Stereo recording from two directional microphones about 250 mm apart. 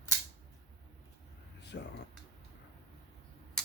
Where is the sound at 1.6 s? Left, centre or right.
Left.